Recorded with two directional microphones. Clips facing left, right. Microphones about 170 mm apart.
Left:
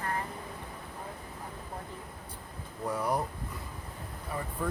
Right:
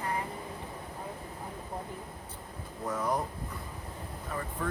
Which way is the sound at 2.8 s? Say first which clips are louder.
Left 1 dB; 10° left (ahead or behind).